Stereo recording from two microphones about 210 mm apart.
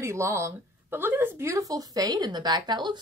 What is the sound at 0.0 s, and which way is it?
Speech, 15° right (ahead or behind).